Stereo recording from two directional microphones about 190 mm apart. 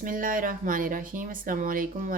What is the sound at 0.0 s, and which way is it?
A woman's voice, 45° right (ahead or behind).